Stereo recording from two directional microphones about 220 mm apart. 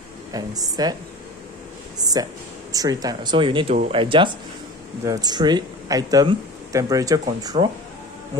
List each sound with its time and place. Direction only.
0.3 s speech: 15° right (ahead or behind)
2.0 s a sound: 15° right (ahead or behind)
2.7 s speech: 15° right (ahead or behind)